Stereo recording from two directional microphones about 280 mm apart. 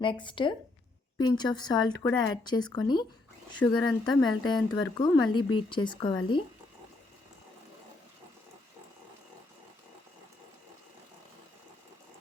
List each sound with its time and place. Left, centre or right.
0.0 s a woman's voice: centre
3.6 s speech: centre
3.8 s a woman's voice: centre